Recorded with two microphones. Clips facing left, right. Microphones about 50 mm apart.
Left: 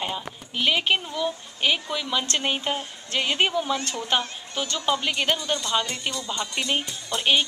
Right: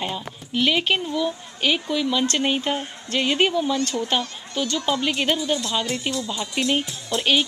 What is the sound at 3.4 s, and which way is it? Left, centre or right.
Speech, left.